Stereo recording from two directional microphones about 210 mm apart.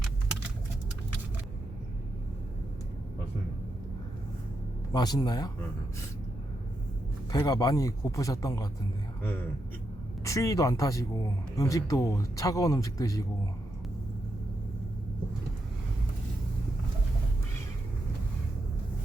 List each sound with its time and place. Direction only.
4.9 s speech: 20° left (ahead or behind)
7.3 s a man's voice: 15° left (ahead or behind)
10.2 s a man's voice: 15° left (ahead or behind)